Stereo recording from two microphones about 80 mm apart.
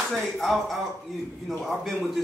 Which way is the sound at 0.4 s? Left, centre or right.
Centre.